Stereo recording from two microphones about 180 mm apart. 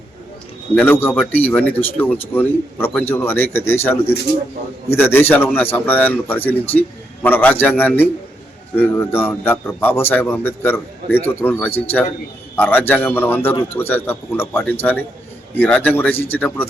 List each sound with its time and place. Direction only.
0.8 s a man's voice: 10° left (ahead or behind)